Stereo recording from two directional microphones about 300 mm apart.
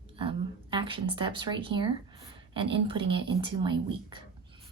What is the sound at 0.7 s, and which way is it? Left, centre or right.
A woman's voice, centre.